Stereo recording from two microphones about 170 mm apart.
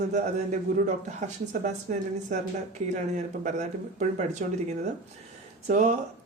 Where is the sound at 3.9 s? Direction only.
45° right (ahead or behind).